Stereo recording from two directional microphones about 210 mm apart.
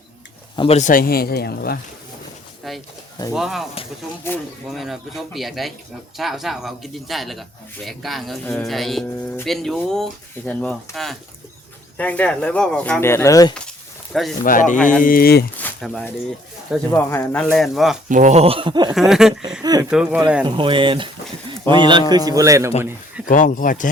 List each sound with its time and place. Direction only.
0.5 s speech: 25° left (ahead or behind); by 1.8 s 50° left (ahead or behind)
2.6 s speech: centre (ahead or behind); by 13.5 s 15° left (ahead or behind)
13.5 s a sound: centre (ahead or behind)
14.4 s speech: 40° left (ahead or behind)
15.5 s speech: 5° left (ahead or behind)
16.9 s speech: 10° left (ahead or behind)
18.1 s speech: 35° right (ahead or behind)
18.9 s speech: centre (ahead or behind)
19.6 s speech: 20° right (ahead or behind)
19.9 s speech: 5° right (ahead or behind)
20.4 s a man's voice: 25° right (ahead or behind)
23.2 s speech: 40° left (ahead or behind)